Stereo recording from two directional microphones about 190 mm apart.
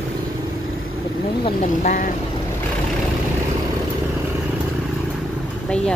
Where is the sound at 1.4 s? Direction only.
40° left (ahead or behind).